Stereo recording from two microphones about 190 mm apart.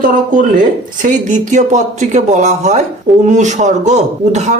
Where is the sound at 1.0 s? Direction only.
40° right (ahead or behind).